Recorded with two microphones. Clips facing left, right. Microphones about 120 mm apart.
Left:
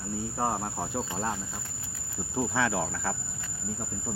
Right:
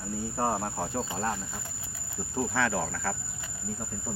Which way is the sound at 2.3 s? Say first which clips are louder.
Even; 10° left (ahead or behind).